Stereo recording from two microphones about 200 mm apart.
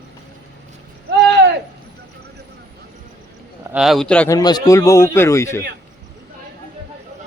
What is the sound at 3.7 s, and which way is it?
Speech, centre (ahead or behind).